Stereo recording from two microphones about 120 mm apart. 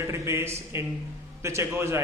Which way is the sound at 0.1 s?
20° right (ahead or behind).